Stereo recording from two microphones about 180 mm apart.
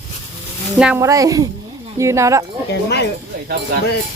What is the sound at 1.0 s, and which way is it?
Speech, 20° right (ahead or behind).